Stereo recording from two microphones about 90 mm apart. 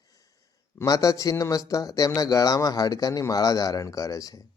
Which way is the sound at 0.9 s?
40° left (ahead or behind).